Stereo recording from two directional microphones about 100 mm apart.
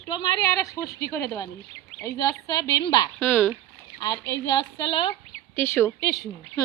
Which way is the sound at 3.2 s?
20° left (ahead or behind).